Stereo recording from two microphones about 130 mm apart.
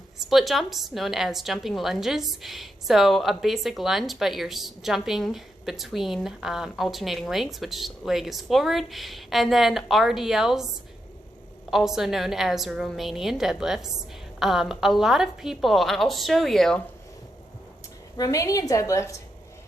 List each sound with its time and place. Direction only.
0.3 s a woman's voice: centre (ahead or behind)
11.7 s a woman's voice: 5° right (ahead or behind)
18.2 s a woman's voice: 25° left (ahead or behind)